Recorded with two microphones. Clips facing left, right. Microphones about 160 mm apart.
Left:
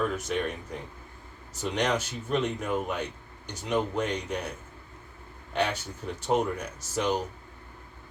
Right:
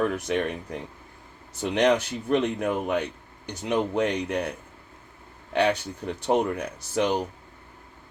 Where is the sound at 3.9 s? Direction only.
70° right (ahead or behind).